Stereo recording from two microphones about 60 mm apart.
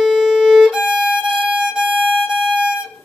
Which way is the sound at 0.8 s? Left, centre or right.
Centre.